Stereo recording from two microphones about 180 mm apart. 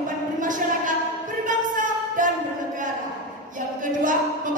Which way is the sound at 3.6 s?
45° right (ahead or behind).